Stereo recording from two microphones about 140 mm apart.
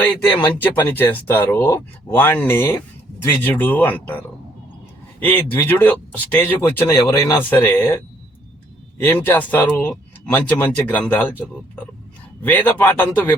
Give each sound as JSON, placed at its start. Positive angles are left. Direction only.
{"t": 0.0, "sound": "speech", "side_deg": 10}
{"t": 5.2, "sound": "speech", "side_deg": 15}